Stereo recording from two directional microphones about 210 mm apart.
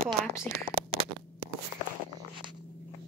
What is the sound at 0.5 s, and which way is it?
Speech, 45° right (ahead or behind).